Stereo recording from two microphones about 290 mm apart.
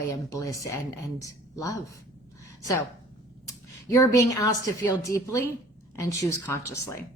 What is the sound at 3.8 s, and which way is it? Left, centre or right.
A woman's voice, centre.